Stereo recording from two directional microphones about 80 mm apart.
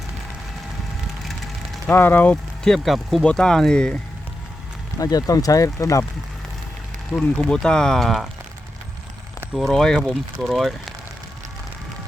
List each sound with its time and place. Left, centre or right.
1.9 s speech: left
2.6 s speech: centre
4.9 s speech: left
7.1 s speech: centre
9.6 s speech: centre